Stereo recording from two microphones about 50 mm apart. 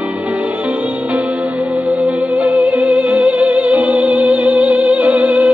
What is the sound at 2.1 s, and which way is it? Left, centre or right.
Music, right.